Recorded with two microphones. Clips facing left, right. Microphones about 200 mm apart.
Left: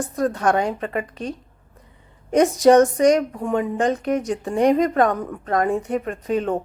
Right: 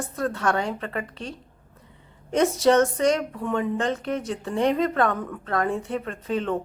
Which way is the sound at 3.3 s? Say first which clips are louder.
Left 3 dB; 45° left (ahead or behind).